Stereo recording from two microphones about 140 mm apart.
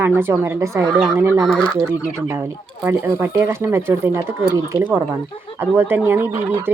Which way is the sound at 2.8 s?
15° right (ahead or behind).